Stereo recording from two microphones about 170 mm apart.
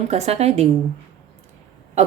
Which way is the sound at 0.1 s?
40° right (ahead or behind).